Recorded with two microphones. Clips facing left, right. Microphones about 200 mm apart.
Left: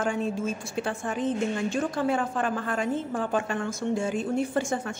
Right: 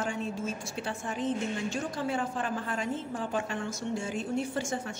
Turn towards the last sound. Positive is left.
turn(degrees=55)  # may be behind; listen again after turning